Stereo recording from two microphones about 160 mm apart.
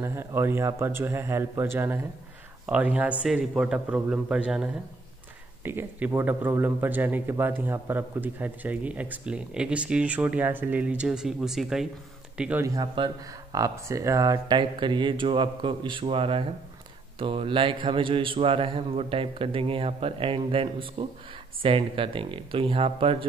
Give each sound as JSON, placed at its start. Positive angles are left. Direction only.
{"t": 0.0, "sound": "a man's voice", "side_deg": -15}
{"t": 12.6, "sound": "a man's voice", "side_deg": -25}